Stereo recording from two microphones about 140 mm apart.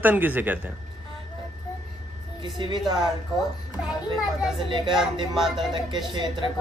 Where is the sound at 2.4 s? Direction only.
35° right (ahead or behind).